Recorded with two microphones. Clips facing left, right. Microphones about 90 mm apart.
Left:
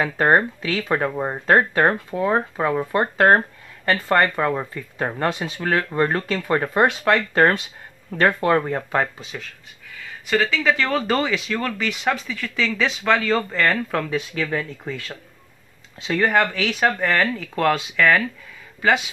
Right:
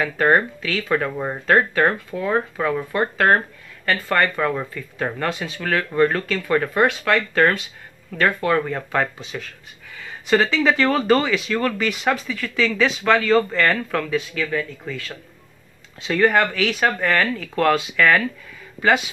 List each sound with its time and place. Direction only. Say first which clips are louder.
0.0 s speech: even; 20° left (ahead or behind)
9.3 s speech: right 3 dB; centre (ahead or behind)
10.3 s speech: right 2 dB; 20° right (ahead or behind)
10.9 s speech: right 3 dB; centre (ahead or behind)
14.5 s speech: right 1 dB; 25° left (ahead or behind)
16.0 s speech: right 2 dB; 5° left (ahead or behind)